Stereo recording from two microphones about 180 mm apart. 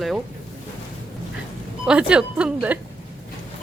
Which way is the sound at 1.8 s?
5° right (ahead or behind).